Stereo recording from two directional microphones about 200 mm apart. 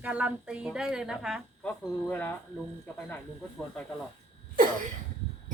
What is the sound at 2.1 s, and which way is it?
Speech, 10° left (ahead or behind).